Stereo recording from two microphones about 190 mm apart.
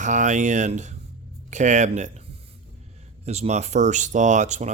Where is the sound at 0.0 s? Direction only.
40° right (ahead or behind).